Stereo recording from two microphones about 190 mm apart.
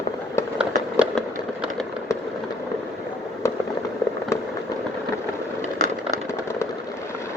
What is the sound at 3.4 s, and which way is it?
Fireworks, 15° left (ahead or behind).